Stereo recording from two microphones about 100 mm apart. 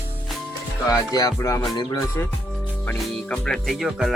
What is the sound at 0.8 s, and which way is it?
Music, 35° left (ahead or behind).